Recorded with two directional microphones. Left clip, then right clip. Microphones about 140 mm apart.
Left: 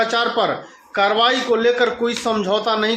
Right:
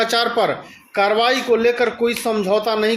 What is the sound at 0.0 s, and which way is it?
A man's voice, 45° right (ahead or behind).